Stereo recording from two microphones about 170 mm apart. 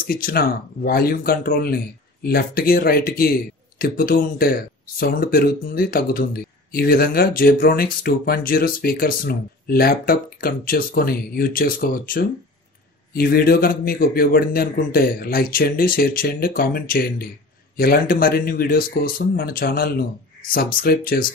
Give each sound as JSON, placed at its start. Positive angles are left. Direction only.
{"t": 0.0, "sound": "speech", "side_deg": 60}